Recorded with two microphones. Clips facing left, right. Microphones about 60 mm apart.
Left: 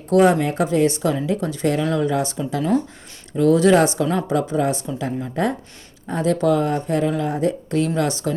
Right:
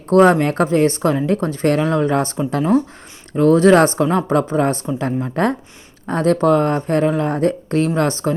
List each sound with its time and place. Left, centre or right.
0.1 s speech: right
7.9 s speech: right